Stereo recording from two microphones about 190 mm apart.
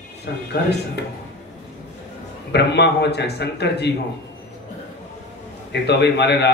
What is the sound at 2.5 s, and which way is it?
A man's voice, 60° left (ahead or behind).